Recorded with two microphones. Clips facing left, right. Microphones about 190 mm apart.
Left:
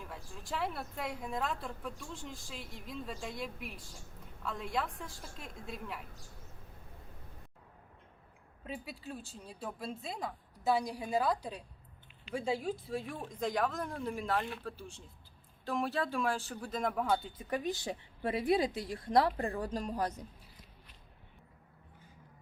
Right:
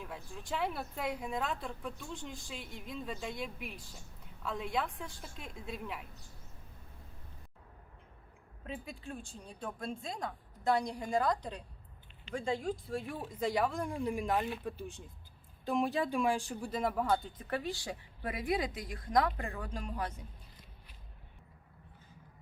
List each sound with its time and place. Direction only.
0.0 s speech: centre (ahead or behind)
8.6 s speech: 5° left (ahead or behind)
17.3 s a woman's voice: 15° left (ahead or behind); by 20.2 s 40° left (ahead or behind)